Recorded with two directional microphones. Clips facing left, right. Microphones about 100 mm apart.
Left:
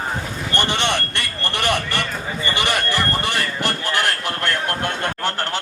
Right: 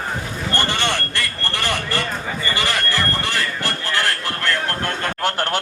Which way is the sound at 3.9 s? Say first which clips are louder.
Left 1 dB; 20° left (ahead or behind).